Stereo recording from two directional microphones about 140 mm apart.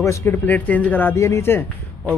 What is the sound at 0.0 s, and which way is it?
A man's voice, 20° left (ahead or behind).